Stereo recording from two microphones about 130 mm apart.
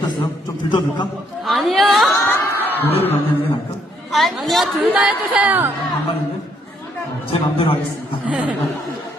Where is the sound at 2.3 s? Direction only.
15° left (ahead or behind).